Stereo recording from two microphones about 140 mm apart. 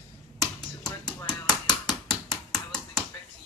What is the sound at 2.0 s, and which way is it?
Chop, 5° left (ahead or behind).